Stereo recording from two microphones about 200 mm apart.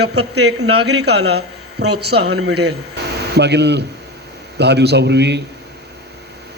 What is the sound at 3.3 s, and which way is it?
A man's voice, 55° right (ahead or behind).